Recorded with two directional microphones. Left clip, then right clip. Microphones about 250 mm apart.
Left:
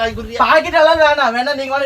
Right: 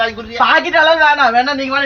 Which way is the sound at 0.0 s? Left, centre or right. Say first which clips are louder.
Right 1 dB; left.